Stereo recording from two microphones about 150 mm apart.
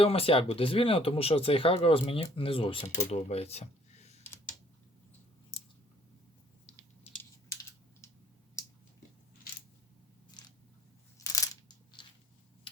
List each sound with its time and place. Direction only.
0.0 s speech: 40° left (ahead or behind)
10.4 s biting: 30° left (ahead or behind)
11.2 s coin: 20° left (ahead or behind)
12.0 s a sound: 30° left (ahead or behind)